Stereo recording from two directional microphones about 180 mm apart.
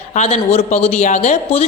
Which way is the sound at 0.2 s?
35° left (ahead or behind).